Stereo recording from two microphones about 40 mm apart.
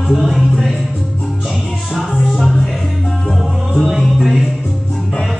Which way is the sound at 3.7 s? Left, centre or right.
Centre.